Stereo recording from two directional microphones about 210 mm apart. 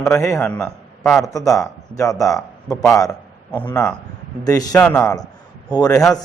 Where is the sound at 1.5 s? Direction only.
15° left (ahead or behind).